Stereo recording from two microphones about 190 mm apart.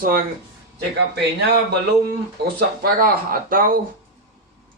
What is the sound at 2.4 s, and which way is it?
Speech, 55° right (ahead or behind).